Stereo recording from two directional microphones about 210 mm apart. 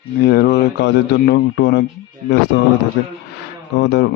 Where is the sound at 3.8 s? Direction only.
55° left (ahead or behind).